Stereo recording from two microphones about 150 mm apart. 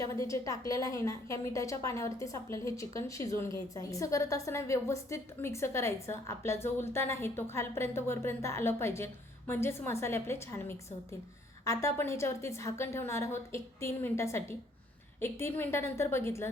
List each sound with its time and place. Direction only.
0.0 s a woman's voice: 20° left (ahead or behind)